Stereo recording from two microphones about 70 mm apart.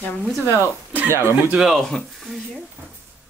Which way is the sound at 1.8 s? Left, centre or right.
Centre.